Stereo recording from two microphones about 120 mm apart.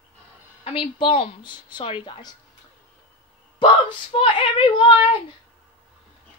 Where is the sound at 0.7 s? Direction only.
45° left (ahead or behind).